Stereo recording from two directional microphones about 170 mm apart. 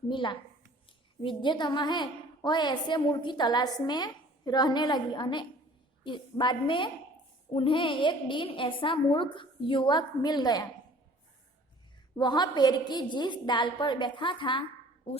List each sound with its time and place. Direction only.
0.1 s a woman's voice: 30° left (ahead or behind)
12.1 s a woman's voice: 25° left (ahead or behind)